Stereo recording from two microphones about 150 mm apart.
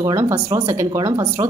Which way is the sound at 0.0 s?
15° right (ahead or behind).